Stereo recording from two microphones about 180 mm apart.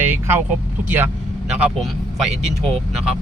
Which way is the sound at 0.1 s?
15° right (ahead or behind).